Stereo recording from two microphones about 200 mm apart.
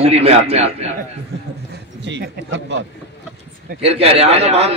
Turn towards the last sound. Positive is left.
turn(degrees=-30)  # may be behind; listen again after turning